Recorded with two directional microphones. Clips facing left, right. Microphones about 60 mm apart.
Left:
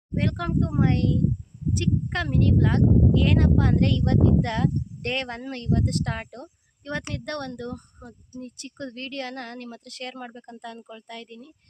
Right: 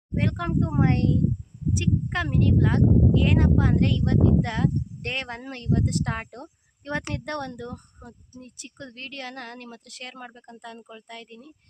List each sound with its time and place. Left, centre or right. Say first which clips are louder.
0.2 s a child's voice: even; centre
1.8 s speech: even; centre